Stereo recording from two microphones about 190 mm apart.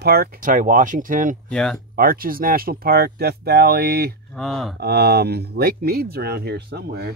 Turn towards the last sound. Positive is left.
turn(degrees=-55)  # may be behind; listen again after turning